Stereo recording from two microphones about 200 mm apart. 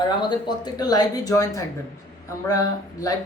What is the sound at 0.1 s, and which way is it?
Speech, 20° left (ahead or behind).